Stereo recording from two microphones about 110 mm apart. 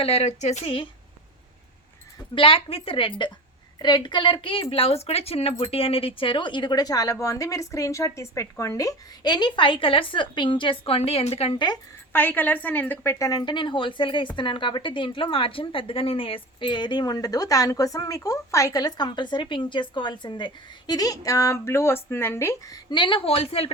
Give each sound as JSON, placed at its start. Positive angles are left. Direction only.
{"t": 0.0, "sound": "speech", "side_deg": 70}
{"t": 2.3, "sound": "a woman's voice", "side_deg": 55}
{"t": 11.5, "sound": "speech", "side_deg": 40}
{"t": 12.1, "sound": "a woman's voice", "side_deg": 15}
{"t": 13.4, "sound": "a woman's voice", "side_deg": 45}